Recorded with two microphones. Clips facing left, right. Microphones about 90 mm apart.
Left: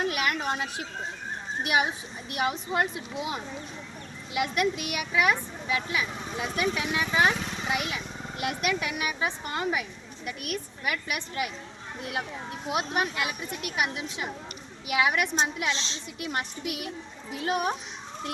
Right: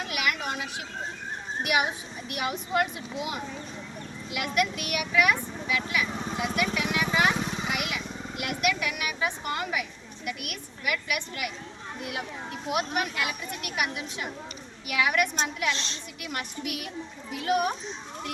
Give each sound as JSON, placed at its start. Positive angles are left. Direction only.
{"t": 0.1, "sound": "a sound", "side_deg": 35}
{"t": 1.6, "sound": "a woman's voice", "side_deg": 30}
{"t": 12.7, "sound": "speech", "side_deg": 25}